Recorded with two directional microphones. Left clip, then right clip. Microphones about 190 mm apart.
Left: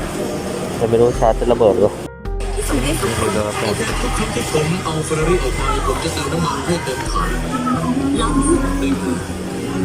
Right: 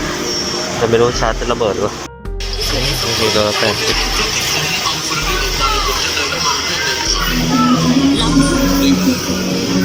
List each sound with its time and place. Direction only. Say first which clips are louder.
0.9 s speech: left 2 dB; 15° left (ahead or behind)